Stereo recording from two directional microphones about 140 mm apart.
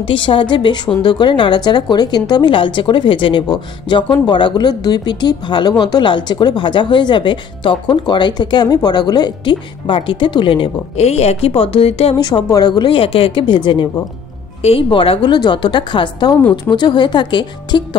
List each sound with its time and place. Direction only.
0.0 s a woman's voice: 40° left (ahead or behind)
12.3 s a woman's voice: 30° left (ahead or behind)